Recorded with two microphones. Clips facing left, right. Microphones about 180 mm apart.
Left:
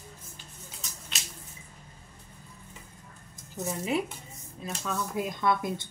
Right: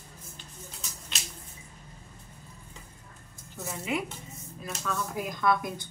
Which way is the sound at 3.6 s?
20° left (ahead or behind).